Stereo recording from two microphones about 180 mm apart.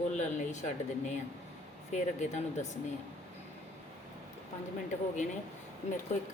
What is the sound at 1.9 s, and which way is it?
Speech, 40° left (ahead or behind).